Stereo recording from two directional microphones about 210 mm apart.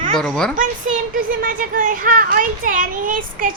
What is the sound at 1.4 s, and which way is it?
A child's voice, 40° right (ahead or behind).